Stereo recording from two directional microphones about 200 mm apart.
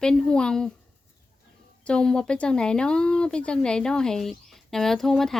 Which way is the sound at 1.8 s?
5° left (ahead or behind).